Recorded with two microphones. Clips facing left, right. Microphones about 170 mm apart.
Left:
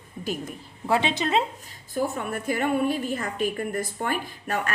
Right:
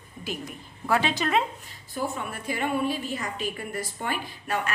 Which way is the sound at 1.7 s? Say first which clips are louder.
Left 4 dB; 50° left (ahead or behind).